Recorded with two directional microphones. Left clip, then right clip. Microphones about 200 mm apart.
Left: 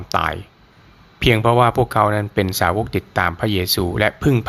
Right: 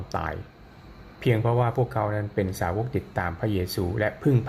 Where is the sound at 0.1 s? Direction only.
15° left (ahead or behind).